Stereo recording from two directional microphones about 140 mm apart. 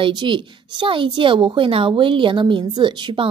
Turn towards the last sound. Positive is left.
turn(degrees=-35)  # may be behind; listen again after turning